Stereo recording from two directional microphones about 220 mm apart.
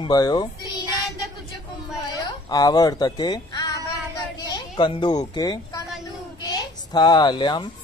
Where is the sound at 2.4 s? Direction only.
15° left (ahead or behind).